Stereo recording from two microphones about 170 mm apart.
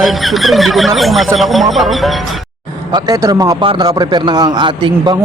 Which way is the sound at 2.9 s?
25° right (ahead or behind).